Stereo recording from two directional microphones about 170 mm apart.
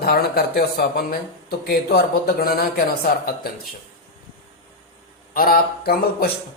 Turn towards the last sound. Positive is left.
turn(degrees=60)  # may be behind; listen again after turning